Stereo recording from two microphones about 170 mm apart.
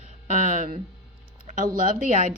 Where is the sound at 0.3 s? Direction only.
50° right (ahead or behind).